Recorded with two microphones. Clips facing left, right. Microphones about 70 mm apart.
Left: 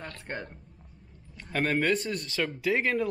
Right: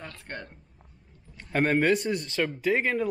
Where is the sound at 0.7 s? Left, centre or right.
Centre.